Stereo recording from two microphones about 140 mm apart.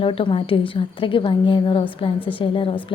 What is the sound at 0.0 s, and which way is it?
A woman's voice, 40° left (ahead or behind).